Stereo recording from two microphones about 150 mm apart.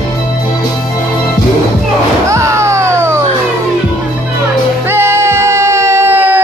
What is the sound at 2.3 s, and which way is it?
Music, 20° right (ahead or behind).